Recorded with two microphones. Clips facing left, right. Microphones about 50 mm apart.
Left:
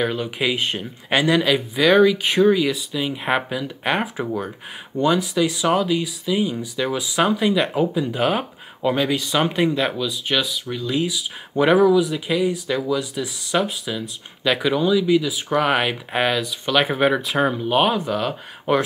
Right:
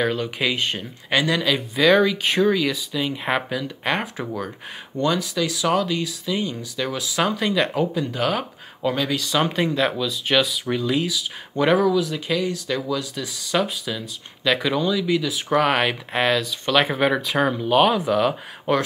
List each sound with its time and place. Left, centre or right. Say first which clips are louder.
0.0 s speech: even; centre
1.1 s speech: left 3 dB; centre
1.8 s speech: left 2 dB; centre
8.1 s speech: left 2 dB; centre
11.1 s speech: even; centre
17.9 s speech: right 3 dB; centre
18.7 s speech: left 2 dB; centre